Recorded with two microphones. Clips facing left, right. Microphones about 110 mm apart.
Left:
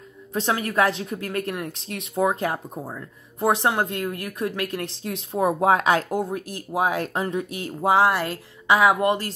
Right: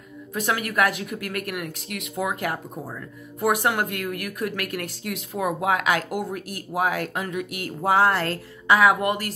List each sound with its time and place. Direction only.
0.3 s a woman's voice: 30° left (ahead or behind)